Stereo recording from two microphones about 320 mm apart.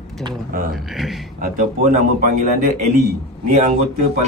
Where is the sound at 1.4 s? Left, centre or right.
Right.